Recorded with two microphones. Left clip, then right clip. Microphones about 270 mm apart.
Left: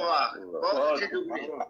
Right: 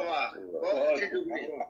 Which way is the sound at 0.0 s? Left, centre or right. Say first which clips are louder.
Left 5 dB; centre.